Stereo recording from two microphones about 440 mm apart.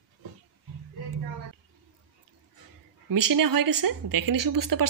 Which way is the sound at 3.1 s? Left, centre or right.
Right.